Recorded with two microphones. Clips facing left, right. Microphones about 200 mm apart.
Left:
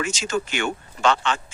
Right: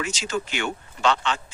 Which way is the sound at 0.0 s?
50° left (ahead or behind).